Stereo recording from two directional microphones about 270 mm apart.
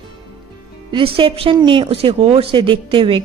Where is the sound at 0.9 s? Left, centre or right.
Centre.